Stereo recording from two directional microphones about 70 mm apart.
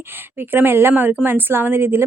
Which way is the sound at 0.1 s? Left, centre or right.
Right.